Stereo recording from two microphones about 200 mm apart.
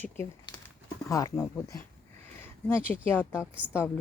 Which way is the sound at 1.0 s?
15° left (ahead or behind).